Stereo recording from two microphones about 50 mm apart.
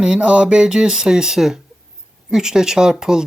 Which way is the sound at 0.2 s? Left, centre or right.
Right.